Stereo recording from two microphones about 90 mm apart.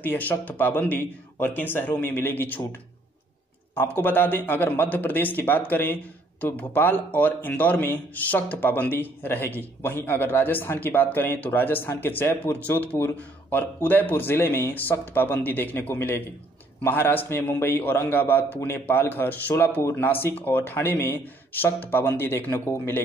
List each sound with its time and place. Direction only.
0.0 s a man's voice: 20° left (ahead or behind)